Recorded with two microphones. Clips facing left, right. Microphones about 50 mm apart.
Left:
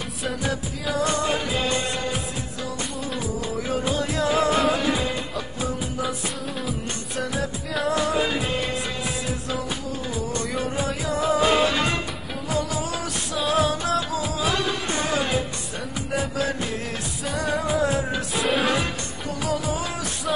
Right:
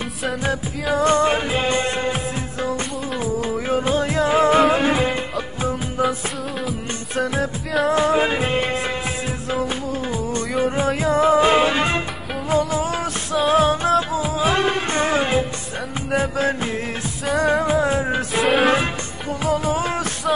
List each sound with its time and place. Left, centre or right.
0.9 s music: right
3.3 s music: right
7.9 s music: right
11.0 s music: right
18.4 s music: centre
19.4 s music: right